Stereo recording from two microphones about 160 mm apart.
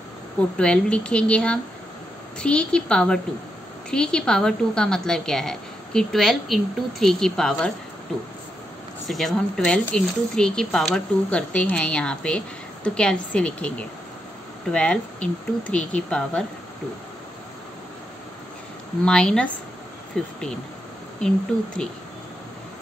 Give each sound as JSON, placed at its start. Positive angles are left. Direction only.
{"t": 0.6, "sound": "speech", "side_deg": 5}
{"t": 19.0, "sound": "speech", "side_deg": 5}